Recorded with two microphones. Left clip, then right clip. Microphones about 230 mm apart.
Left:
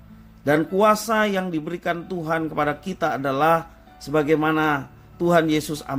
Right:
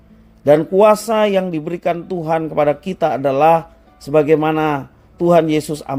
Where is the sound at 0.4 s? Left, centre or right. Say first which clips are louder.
Right 7 dB; right.